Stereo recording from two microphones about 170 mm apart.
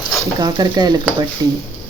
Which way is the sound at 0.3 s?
25° right (ahead or behind).